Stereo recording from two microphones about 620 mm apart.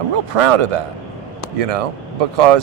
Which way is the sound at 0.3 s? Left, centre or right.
Right.